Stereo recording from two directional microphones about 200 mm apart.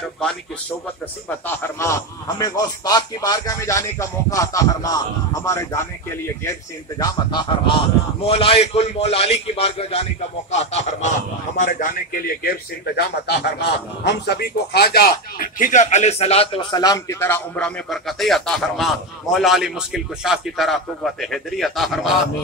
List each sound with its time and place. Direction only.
1.8 s a man's voice: 15° left (ahead or behind); by 22.1 s centre (ahead or behind)